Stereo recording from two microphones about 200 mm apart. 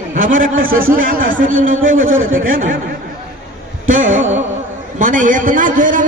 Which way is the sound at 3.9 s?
40° right (ahead or behind).